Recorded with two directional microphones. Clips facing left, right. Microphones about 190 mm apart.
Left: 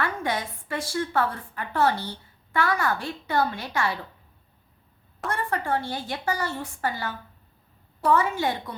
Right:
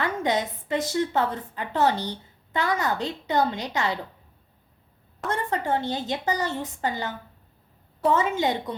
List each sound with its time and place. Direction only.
0.0 s a woman's voice: 20° right (ahead or behind)
5.3 s a woman's voice: 20° right (ahead or behind)